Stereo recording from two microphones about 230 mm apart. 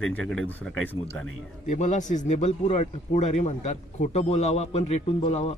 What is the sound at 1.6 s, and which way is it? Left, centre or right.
A man's voice, left.